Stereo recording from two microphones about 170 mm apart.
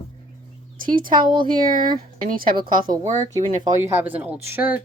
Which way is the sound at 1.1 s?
25° right (ahead or behind).